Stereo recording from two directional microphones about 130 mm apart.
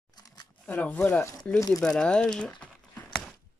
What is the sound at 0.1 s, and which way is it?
Shuffling cards, 30° left (ahead or behind).